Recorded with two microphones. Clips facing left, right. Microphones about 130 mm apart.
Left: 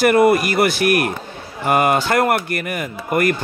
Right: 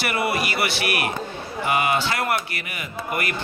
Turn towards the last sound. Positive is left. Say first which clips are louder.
# left 9 dB
turn(degrees=45)  # may be behind; listen again after turning